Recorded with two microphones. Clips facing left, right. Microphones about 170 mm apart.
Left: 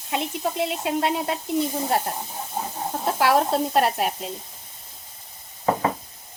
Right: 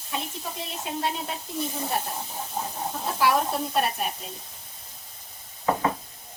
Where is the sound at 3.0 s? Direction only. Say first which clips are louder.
Left 4 dB; 70° left (ahead or behind); by 4.1 s 90° left.